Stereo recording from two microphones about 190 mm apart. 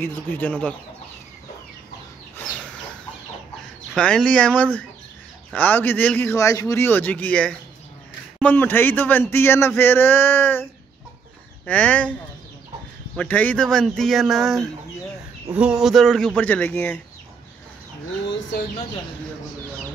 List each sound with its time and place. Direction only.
0.0 s speech: 10° left (ahead or behind)
3.9 s speech: 5° left (ahead or behind)
18.2 s a sound: 70° left (ahead or behind)